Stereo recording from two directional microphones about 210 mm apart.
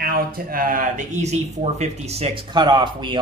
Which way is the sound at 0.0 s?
45° right (ahead or behind).